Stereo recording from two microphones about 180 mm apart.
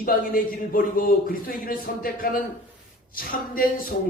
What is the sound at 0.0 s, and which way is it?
A man's voice, 50° left (ahead or behind).